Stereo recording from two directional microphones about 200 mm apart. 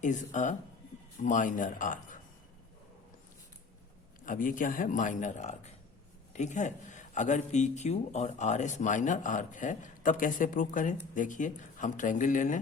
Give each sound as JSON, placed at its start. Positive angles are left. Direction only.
{"t": 0.0, "sound": "speech", "side_deg": 40}
{"t": 4.3, "sound": "speech", "side_deg": 40}